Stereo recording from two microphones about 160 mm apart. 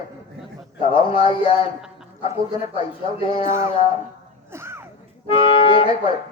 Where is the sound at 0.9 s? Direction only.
35° left (ahead or behind).